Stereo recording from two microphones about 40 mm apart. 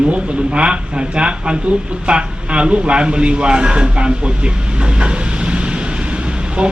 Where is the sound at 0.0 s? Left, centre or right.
Right.